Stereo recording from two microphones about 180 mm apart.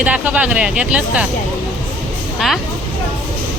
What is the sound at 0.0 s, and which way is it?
Speech, 10° right (ahead or behind).